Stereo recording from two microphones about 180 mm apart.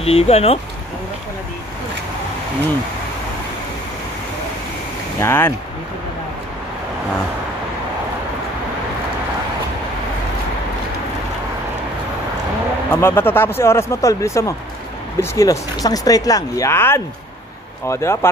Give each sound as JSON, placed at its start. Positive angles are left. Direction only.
{"t": 0.0, "sound": "speech", "side_deg": 35}
{"t": 5.2, "sound": "speech", "side_deg": 10}
{"t": 12.9, "sound": "speech", "side_deg": 10}